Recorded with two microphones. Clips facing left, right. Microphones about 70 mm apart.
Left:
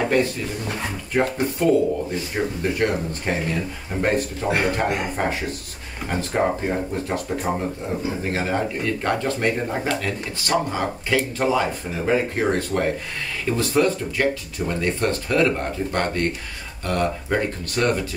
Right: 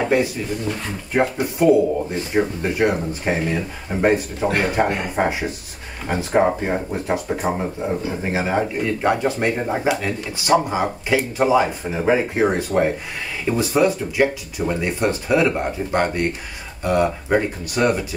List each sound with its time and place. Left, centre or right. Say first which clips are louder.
0.0 s speech: right 1 dB; centre
1.4 s speech: right 4 dB; centre